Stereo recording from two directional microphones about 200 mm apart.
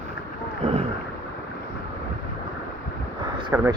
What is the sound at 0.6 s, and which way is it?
Boat, 30° right (ahead or behind).